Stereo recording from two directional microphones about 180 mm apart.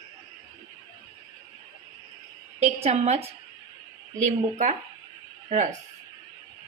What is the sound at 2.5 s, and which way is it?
Speech, 35° right (ahead or behind).